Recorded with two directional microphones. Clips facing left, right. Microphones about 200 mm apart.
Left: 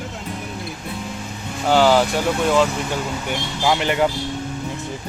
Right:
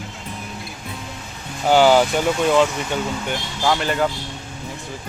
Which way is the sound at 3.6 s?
15° left (ahead or behind).